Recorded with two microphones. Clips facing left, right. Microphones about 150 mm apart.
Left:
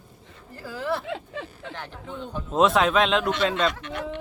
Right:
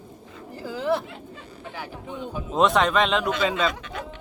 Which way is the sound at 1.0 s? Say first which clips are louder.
Left 7 dB; 90° left.